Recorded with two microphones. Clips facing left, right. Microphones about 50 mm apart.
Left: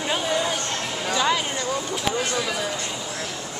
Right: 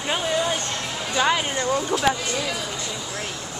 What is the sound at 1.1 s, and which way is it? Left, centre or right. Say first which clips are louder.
Speech: right 2 dB; centre.